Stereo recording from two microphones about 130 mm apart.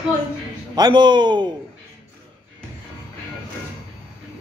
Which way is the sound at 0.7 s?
35° right (ahead or behind).